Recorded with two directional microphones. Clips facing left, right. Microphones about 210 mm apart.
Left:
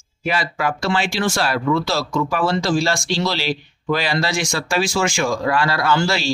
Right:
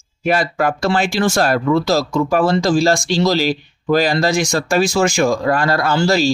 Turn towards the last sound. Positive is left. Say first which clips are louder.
# right 4 dB
turn(degrees=-40)  # may be behind; listen again after turning